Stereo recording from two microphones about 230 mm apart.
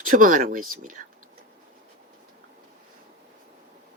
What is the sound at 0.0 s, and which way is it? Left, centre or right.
Speech, right.